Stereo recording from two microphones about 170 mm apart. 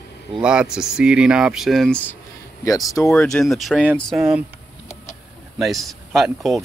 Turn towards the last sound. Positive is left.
turn(degrees=0)  # may be behind; listen again after turning